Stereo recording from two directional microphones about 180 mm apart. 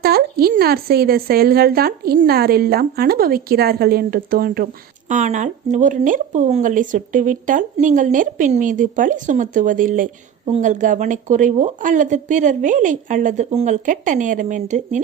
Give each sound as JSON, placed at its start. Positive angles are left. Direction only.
{"t": 0.0, "sound": "a woman's voice", "side_deg": -60}